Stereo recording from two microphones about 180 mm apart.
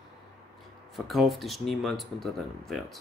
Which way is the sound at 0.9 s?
Centre (ahead or behind).